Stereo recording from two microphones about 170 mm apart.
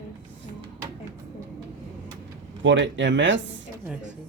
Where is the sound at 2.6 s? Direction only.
90° right.